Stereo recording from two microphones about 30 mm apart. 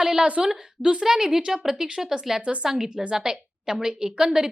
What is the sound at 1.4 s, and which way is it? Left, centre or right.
Speech, right.